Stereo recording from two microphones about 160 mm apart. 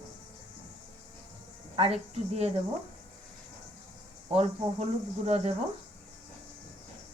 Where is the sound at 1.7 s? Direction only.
40° right (ahead or behind).